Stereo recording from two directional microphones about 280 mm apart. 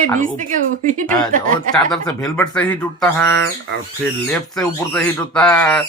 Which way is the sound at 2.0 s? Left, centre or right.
Centre.